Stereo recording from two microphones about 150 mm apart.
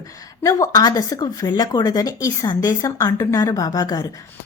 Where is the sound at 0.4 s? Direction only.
25° left (ahead or behind).